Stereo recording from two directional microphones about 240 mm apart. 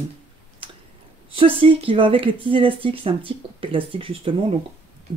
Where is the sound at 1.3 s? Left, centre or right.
Right.